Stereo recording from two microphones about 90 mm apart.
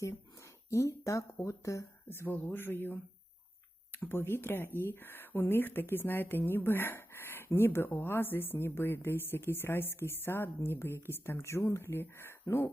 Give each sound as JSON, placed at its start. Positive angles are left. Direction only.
{"t": 0.0, "sound": "speech", "side_deg": 35}